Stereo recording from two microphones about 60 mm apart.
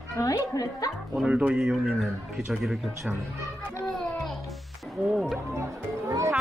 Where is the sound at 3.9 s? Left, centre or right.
Centre.